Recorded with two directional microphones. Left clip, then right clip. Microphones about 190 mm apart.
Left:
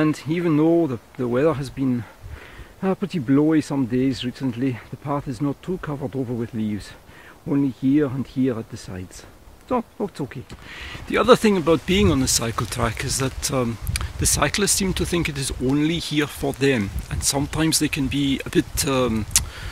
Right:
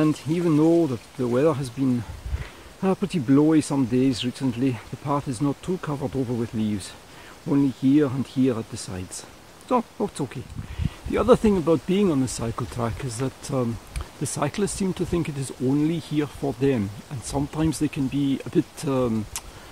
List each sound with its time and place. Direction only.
0.0 s speech: 5° left (ahead or behind)